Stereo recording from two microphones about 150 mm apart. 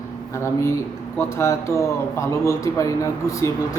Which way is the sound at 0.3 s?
20° left (ahead or behind).